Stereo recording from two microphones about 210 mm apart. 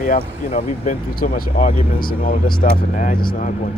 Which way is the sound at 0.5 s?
40° left (ahead or behind).